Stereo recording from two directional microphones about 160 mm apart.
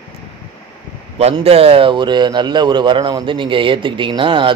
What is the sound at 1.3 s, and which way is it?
Speech, 35° right (ahead or behind).